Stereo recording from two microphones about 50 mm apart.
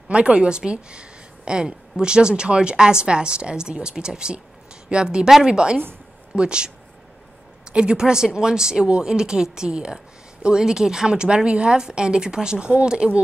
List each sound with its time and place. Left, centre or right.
0.1 s speech: right
7.7 s speech: centre